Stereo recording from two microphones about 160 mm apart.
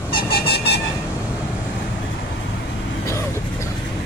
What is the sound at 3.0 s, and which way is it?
Vehicle, 20° left (ahead or behind).